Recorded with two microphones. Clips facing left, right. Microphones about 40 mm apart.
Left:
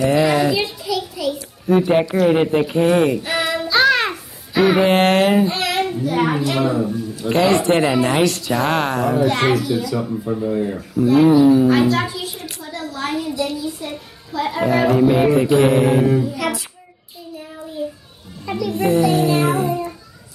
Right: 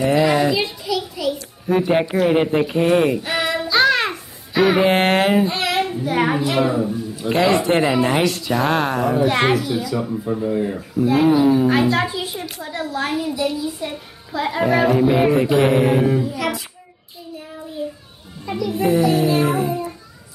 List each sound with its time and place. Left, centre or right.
0.1 s a sound: centre
2.1 s a child's voice: centre
12.7 s a child's voice: centre
13.0 s a child's voice: centre
17.8 s children playing: centre
18.7 s music: centre